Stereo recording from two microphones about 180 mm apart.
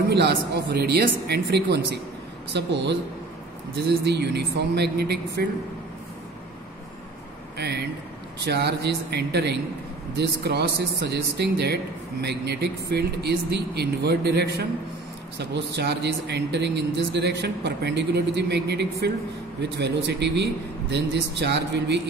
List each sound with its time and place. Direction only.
0.1 s a man's voice: 70° right (ahead or behind)
7.5 s a man's voice: 65° right (ahead or behind)